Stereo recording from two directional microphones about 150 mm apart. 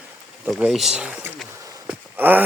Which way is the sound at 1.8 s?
10° right (ahead or behind).